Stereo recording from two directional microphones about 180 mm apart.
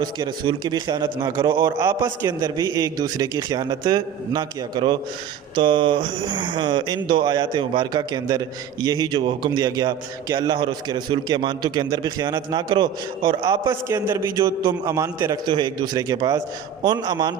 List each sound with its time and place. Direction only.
0.0 s speech: 25° right (ahead or behind)